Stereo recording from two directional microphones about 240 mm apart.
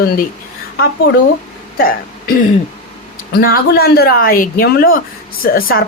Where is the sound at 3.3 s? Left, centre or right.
Left.